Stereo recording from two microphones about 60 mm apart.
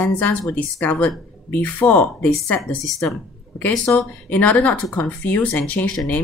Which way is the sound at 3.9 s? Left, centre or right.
Left.